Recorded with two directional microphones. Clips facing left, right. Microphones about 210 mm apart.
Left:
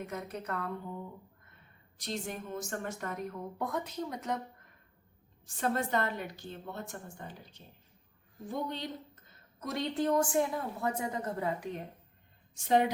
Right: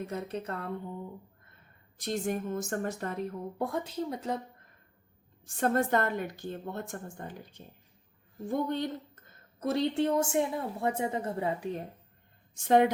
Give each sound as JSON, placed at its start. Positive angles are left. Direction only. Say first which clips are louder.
{"t": 0.0, "sound": "a woman's voice", "louder": "right 4 dB", "side_deg": -30}
{"t": 2.0, "sound": "a woman's voice", "louder": "right 7 dB", "side_deg": -50}
{"t": 3.0, "sound": "a woman's voice", "louder": "right 3 dB", "side_deg": -30}
{"t": 5.5, "sound": "a woman's voice", "louder": "right 4 dB", "side_deg": -50}
{"t": 9.6, "sound": "a woman's voice", "louder": "right 5 dB", "side_deg": -30}
{"t": 12.6, "sound": "a woman's voice", "louder": "right 4 dB", "side_deg": -50}